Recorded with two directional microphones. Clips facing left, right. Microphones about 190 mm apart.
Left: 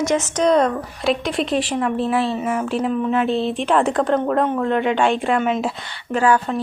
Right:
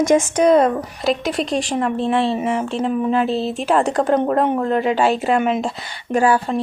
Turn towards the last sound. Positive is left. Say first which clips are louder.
# right 1 dB
turn(degrees=-10)  # may be behind; listen again after turning